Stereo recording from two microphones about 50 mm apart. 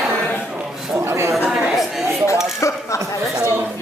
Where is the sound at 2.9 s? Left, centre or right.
Left.